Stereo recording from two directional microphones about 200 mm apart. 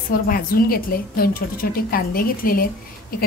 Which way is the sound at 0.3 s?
45° left (ahead or behind).